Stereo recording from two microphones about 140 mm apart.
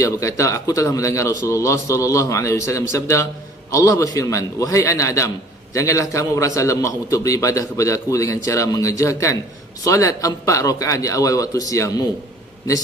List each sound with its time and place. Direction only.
0.0 s a man's voice: 20° left (ahead or behind)